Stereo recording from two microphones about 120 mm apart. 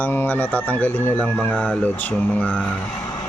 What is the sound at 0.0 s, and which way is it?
Speech, 15° left (ahead or behind).